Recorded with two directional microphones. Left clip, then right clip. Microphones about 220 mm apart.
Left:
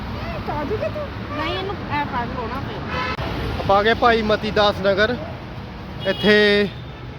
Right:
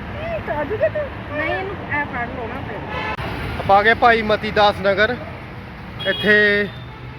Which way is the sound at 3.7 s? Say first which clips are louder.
Right 3 dB; 5° left (ahead or behind).